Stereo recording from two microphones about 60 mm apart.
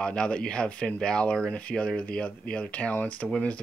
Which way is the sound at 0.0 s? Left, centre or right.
Centre.